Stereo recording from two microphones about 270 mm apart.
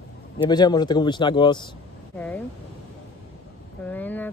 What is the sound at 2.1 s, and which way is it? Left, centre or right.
Speech, centre.